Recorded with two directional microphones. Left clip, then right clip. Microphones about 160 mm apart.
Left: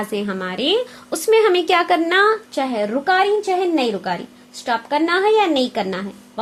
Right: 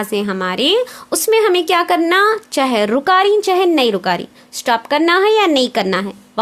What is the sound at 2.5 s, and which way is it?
A woman's voice, 50° right (ahead or behind).